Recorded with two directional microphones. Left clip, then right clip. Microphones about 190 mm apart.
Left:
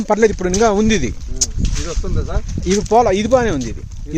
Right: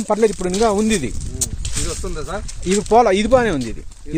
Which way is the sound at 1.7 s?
15° right (ahead or behind).